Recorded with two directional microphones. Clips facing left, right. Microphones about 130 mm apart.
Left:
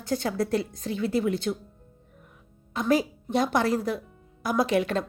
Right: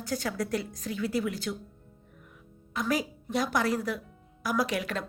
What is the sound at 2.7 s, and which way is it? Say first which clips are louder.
A woman's voice: left 6 dB; 25° left (ahead or behind).